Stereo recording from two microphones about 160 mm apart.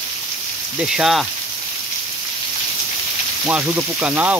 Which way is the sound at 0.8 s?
5° right (ahead or behind).